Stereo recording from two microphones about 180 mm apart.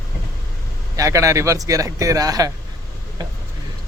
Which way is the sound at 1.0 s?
15° right (ahead or behind).